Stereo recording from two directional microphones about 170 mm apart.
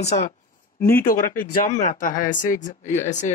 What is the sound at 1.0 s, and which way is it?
Speech, 55° left (ahead or behind).